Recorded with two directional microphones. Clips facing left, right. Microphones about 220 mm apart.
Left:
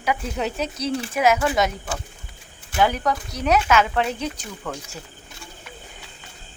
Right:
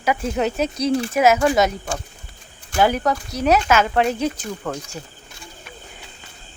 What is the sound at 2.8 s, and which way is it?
Speech, 40° right (ahead or behind).